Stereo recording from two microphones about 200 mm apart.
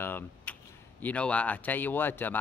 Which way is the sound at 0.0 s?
10° left (ahead or behind).